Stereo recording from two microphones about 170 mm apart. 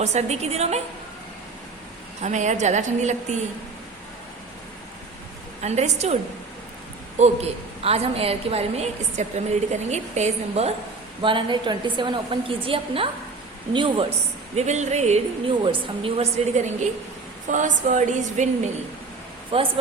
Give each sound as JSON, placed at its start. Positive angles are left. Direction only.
{"t": 0.0, "sound": "a woman's voice", "side_deg": -40}
{"t": 2.2, "sound": "a woman's voice", "side_deg": -45}
{"t": 5.6, "sound": "a woman's voice", "side_deg": -40}
{"t": 7.2, "sound": "a woman's voice", "side_deg": -35}
{"t": 11.2, "sound": "a woman's voice", "side_deg": -30}
{"t": 14.5, "sound": "a woman's voice", "side_deg": -45}
{"t": 15.6, "sound": "a woman's voice", "side_deg": -30}
{"t": 19.5, "sound": "a woman's voice", "side_deg": -35}